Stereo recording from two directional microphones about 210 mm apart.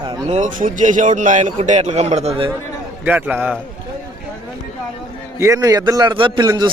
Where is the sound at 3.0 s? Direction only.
10° right (ahead or behind).